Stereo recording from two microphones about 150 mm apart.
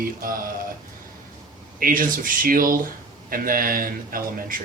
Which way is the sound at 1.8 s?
70° right (ahead or behind).